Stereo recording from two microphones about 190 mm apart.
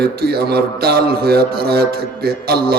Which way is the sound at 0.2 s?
55° right (ahead or behind).